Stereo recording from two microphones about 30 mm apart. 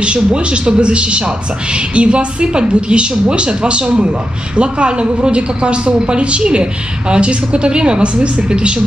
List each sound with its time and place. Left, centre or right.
0.0 s a woman's voice: right